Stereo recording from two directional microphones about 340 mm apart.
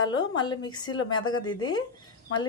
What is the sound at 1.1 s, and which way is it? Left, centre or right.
Speech, left.